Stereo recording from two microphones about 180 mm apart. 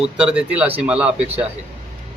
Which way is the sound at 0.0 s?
5° right (ahead or behind).